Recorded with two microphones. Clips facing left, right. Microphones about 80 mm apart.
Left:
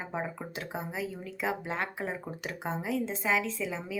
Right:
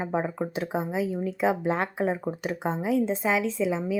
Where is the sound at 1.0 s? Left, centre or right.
Right.